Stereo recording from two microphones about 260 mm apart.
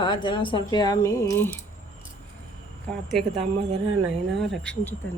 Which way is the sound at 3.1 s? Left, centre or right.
Centre.